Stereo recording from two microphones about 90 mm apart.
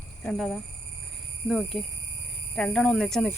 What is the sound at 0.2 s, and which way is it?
Speech, 5° left (ahead or behind).